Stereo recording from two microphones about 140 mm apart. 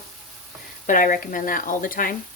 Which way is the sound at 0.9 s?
70° left (ahead or behind).